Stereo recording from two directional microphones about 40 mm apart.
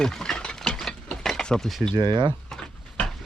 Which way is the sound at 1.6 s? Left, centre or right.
Centre.